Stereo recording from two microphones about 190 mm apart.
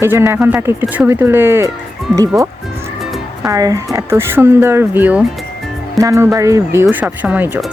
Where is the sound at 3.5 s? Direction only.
20° right (ahead or behind).